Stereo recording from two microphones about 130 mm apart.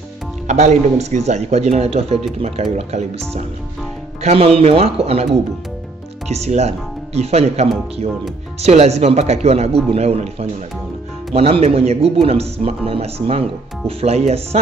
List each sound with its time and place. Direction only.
0.5 s speech: 60° right (ahead or behind)
4.2 s speech: 50° right (ahead or behind)